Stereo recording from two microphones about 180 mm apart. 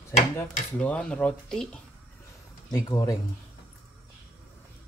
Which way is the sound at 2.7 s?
20° left (ahead or behind).